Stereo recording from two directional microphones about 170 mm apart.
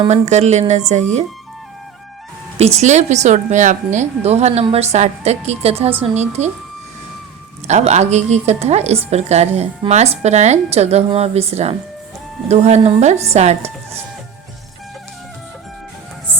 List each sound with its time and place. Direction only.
0.1 s a woman's voice: 40° right (ahead or behind)
2.6 s a woman's voice: 40° right (ahead or behind)
7.7 s a woman's voice: 40° right (ahead or behind)